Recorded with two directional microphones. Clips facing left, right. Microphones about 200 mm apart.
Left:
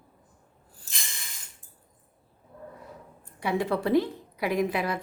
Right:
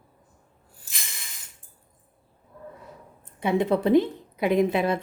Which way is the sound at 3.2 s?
20° right (ahead or behind).